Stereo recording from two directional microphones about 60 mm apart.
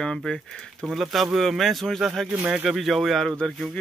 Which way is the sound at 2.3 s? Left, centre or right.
Centre.